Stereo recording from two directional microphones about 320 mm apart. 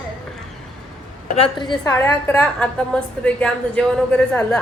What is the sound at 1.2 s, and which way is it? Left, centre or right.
A woman's voice, centre.